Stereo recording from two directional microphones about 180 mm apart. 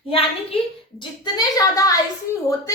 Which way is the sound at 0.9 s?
20° left (ahead or behind).